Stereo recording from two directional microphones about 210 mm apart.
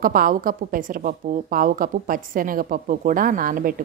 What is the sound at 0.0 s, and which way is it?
A woman's voice, 40° right (ahead or behind).